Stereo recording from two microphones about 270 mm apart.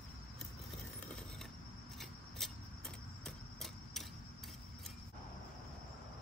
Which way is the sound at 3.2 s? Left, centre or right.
Centre.